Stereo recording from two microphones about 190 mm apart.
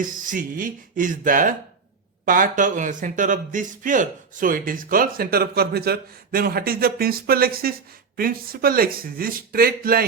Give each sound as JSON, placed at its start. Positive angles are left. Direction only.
{"t": 0.0, "sound": "a man's voice", "side_deg": -45}